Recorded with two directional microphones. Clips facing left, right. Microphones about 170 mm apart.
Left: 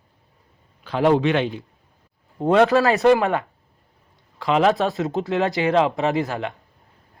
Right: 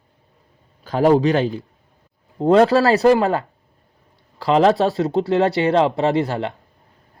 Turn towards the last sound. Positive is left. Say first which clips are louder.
# right 3 dB
turn(degrees=-35)  # may be behind; listen again after turning